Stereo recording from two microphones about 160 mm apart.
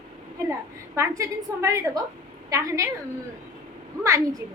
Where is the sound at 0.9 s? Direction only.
20° right (ahead or behind).